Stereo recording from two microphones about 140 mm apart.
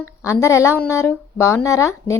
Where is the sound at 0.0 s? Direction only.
20° left (ahead or behind).